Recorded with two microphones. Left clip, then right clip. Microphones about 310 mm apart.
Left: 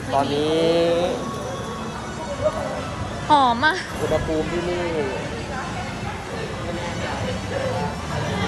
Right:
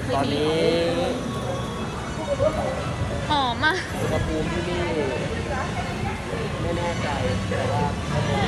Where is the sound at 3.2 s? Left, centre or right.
Centre.